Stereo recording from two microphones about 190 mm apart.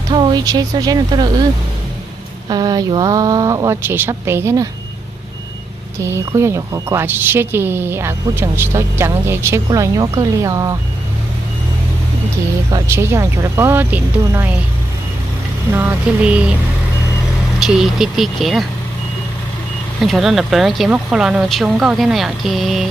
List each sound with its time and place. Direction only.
0.1 s speech: 20° right (ahead or behind)
2.5 s speech: 20° right (ahead or behind)
5.9 s speech: 15° right (ahead or behind)
12.7 s speech: 15° right (ahead or behind)
15.7 s speech: 10° right (ahead or behind)
17.6 s speech: centre (ahead or behind)
20.0 s speech: centre (ahead or behind)